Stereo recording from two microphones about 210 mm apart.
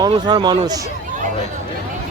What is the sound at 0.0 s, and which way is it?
Speech, 20° right (ahead or behind).